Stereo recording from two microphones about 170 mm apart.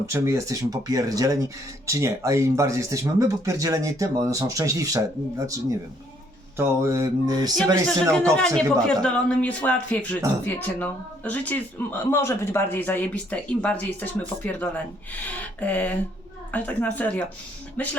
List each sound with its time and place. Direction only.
0.0 s speech: 15° right (ahead or behind)
6.6 s a sound: 15° right (ahead or behind)
7.5 s speech: 5° left (ahead or behind)